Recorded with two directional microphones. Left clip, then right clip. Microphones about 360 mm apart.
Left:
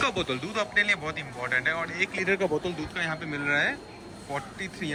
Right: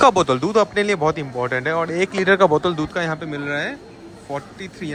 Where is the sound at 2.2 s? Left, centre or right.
Right.